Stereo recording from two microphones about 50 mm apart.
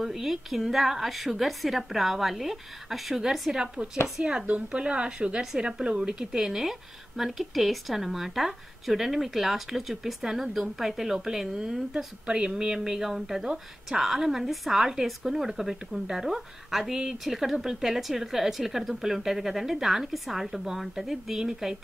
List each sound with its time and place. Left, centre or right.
0.0 s a woman's voice: centre
3.5 s a woman's voice: centre